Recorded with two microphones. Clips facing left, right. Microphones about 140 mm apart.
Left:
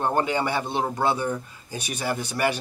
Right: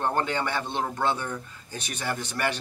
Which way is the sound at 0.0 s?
10° left (ahead or behind).